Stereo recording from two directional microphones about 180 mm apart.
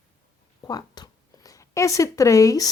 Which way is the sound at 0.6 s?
20° left (ahead or behind).